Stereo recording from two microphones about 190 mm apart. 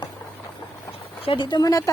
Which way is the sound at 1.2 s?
25° left (ahead or behind).